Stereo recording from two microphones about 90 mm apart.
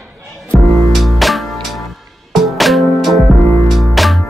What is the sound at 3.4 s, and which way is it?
Music, 35° left (ahead or behind).